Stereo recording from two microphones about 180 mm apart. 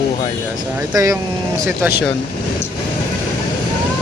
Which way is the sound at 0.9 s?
20° right (ahead or behind).